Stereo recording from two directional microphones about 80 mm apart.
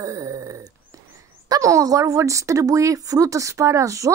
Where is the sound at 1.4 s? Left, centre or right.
Right.